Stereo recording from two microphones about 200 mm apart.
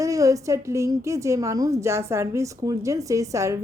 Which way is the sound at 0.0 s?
15° right (ahead or behind).